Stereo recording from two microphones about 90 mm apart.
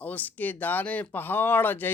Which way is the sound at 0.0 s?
20° left (ahead or behind).